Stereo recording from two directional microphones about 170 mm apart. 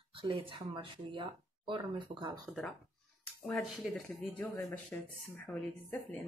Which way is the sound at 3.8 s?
Centre (ahead or behind).